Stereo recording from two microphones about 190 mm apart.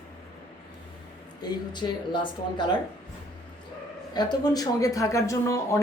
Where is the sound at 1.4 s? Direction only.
20° left (ahead or behind).